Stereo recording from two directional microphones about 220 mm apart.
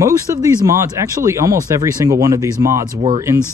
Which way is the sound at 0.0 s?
15° right (ahead or behind).